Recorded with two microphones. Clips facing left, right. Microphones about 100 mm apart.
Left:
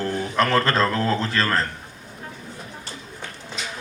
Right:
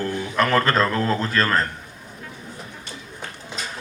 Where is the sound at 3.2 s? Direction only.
40° right (ahead or behind).